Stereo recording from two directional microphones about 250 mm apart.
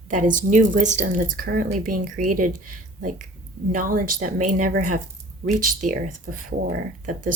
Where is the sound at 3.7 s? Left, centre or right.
Right.